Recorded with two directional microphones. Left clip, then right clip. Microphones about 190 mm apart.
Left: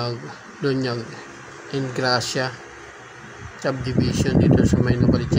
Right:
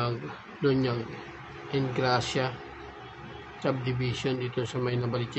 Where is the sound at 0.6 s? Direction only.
20° left (ahead or behind).